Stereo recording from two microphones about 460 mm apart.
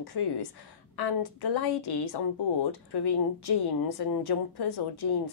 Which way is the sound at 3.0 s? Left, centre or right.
Left.